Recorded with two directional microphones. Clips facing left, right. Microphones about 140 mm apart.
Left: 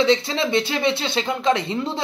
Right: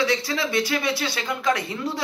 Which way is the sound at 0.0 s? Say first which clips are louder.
Left 5 dB; 25° left (ahead or behind).